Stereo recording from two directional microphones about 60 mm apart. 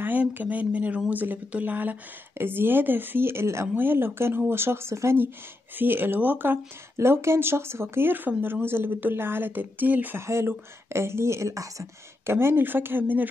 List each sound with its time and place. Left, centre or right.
0.0 s speech: right
3.7 s speech: right
5.8 s speech: right
7.0 s speech: right
10.1 s speech: right
12.3 s speech: right